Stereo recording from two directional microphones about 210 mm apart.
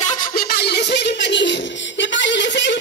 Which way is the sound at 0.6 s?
50° left (ahead or behind).